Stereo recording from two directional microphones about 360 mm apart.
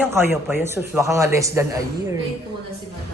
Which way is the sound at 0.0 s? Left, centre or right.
Centre.